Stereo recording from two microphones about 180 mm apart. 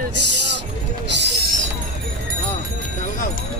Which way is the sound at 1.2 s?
65° right (ahead or behind).